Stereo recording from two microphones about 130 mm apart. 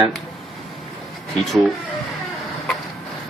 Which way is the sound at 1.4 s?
Centre (ahead or behind).